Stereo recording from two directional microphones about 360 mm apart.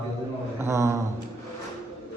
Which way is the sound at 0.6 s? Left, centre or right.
Centre.